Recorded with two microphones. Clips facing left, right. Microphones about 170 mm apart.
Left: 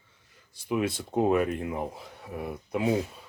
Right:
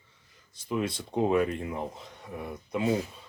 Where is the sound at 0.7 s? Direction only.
5° left (ahead or behind).